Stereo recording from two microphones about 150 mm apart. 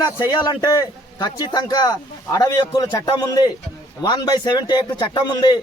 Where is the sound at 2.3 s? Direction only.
25° left (ahead or behind).